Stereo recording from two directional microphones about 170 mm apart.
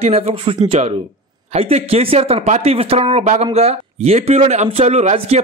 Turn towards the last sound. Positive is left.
turn(degrees=-35)  # may be behind; listen again after turning